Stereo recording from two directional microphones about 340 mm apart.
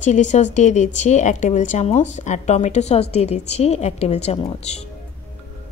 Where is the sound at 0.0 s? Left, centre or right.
Left.